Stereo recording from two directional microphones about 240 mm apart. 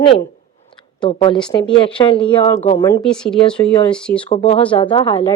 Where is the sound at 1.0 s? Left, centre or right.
Left.